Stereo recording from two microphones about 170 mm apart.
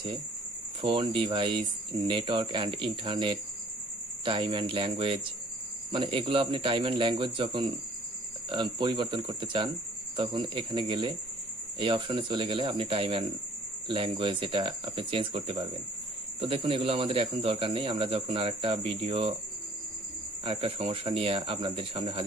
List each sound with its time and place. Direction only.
0.8 s speech: 30° right (ahead or behind)
20.4 s speech: 30° right (ahead or behind)